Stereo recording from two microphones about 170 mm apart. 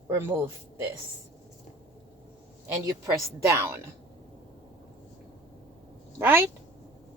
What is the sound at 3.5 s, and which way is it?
Speech, 15° right (ahead or behind).